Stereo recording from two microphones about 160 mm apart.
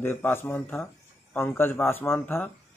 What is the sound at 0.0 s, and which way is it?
Speech, 15° left (ahead or behind).